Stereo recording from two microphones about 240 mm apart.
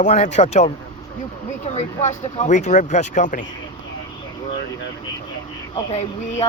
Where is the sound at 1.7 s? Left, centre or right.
Left.